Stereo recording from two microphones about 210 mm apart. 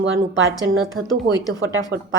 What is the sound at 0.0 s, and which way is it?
Speech, 70° right (ahead or behind).